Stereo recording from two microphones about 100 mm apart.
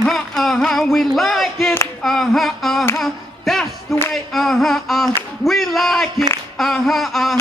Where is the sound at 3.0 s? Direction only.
Centre (ahead or behind).